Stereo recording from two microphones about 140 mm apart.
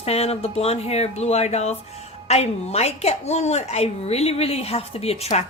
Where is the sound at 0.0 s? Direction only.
45° left (ahead or behind).